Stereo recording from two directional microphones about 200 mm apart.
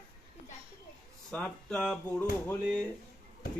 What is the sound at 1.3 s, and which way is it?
Speech, 5° left (ahead or behind).